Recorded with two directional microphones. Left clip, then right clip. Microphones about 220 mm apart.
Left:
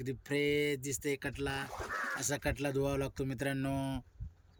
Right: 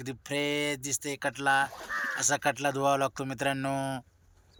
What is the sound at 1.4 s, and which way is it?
Speech, 40° right (ahead or behind).